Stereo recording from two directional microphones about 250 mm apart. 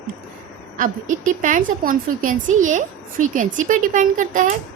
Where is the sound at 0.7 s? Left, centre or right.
Right.